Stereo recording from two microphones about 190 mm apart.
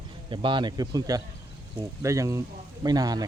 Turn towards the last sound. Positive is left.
turn(degrees=-20)  # may be behind; listen again after turning